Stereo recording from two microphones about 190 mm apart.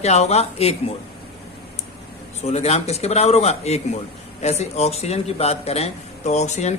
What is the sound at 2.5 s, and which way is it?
Speech, 35° left (ahead or behind).